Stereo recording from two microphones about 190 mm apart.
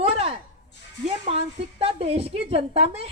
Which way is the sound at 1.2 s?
30° right (ahead or behind).